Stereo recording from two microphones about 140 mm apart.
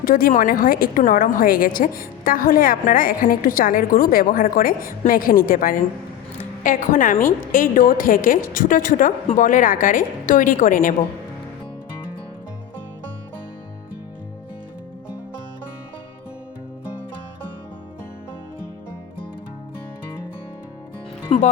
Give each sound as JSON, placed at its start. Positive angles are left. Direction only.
{"t": 0.0, "sound": "a woman's voice", "side_deg": 90}
{"t": 7.5, "sound": "a woman's voice", "side_deg": 85}
{"t": 21.3, "sound": "music", "side_deg": 45}